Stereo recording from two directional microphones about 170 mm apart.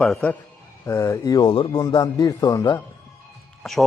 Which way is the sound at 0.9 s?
15° left (ahead or behind).